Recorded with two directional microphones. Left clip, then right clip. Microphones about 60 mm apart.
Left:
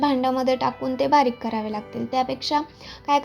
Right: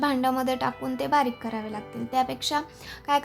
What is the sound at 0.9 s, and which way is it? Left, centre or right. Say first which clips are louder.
Speech: left 6 dB; left.